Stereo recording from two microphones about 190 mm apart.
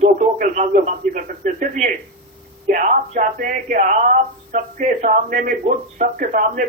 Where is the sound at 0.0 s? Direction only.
45° right (ahead or behind).